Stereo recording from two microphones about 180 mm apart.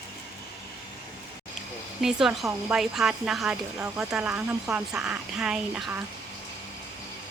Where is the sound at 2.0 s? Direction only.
Centre (ahead or behind).